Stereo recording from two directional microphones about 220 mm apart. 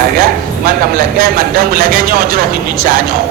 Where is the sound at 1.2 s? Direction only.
40° right (ahead or behind).